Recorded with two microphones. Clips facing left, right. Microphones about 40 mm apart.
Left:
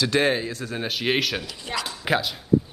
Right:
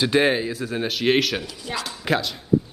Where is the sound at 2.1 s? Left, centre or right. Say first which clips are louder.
Right 1 dB; centre.